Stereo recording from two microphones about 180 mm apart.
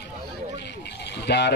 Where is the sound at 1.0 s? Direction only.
70° left (ahead or behind).